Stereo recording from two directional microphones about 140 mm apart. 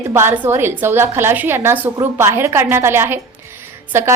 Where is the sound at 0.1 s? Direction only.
15° right (ahead or behind).